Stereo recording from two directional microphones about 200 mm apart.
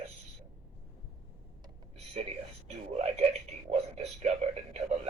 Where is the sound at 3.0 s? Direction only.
30° right (ahead or behind).